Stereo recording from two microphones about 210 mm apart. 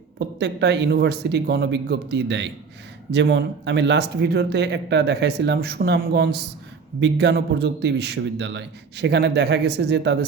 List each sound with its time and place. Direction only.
0.3 s speech: 55° right (ahead or behind)